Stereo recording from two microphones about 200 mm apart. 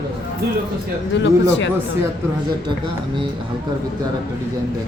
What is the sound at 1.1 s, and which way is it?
Speech, 65° left (ahead or behind).